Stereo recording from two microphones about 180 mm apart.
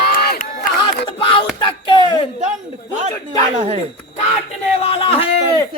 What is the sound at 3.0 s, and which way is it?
Speech, 40° right (ahead or behind).